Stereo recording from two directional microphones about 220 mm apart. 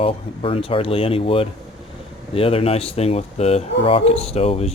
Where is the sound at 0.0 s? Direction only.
25° left (ahead or behind).